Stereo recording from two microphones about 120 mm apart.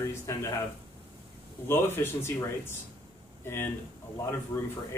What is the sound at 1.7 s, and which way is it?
Speech, 20° left (ahead or behind).